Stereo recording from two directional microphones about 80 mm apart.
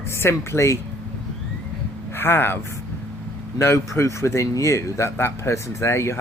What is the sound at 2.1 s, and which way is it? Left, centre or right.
Speech, left.